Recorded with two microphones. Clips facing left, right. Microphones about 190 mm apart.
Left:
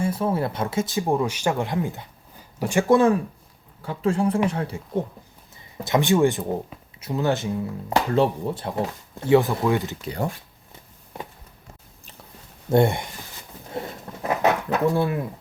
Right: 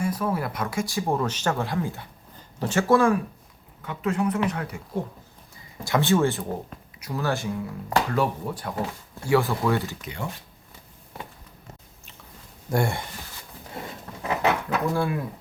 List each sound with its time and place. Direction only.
0.0 s speech: 25° left (ahead or behind)
10.0 s speech: 35° left (ahead or behind)
12.7 s speech: 20° left (ahead or behind)
14.7 s speech: 25° left (ahead or behind)